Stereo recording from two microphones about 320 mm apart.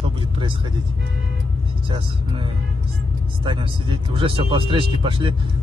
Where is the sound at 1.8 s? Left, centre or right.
Centre.